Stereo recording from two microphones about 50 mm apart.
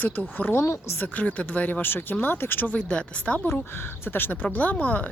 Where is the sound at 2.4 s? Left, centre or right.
Left.